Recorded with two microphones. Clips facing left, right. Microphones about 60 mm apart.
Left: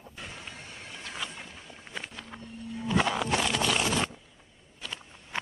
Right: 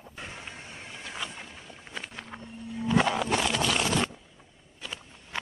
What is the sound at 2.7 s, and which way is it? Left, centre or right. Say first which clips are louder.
Music: right 2 dB; centre.